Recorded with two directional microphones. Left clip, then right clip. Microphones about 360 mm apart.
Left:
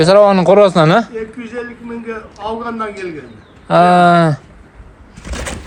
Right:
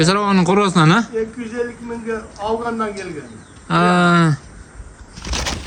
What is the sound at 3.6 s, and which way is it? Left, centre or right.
Speech, centre.